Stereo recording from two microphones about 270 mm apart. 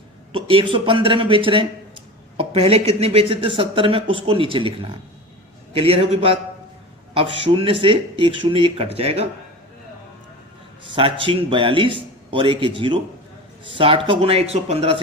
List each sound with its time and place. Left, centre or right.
0.3 s speech: centre
10.9 s speech: centre